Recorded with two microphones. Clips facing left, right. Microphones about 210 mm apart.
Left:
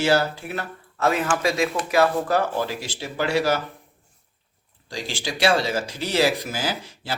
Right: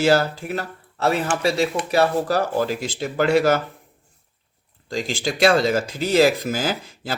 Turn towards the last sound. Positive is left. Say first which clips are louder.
# right 3 dB
turn(degrees=-45)  # may be behind; listen again after turning